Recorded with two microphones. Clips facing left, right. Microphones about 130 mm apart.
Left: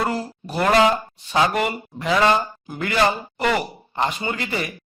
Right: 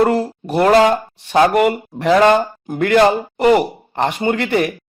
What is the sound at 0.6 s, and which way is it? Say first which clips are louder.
Speech: right 5 dB; 40° right (ahead or behind).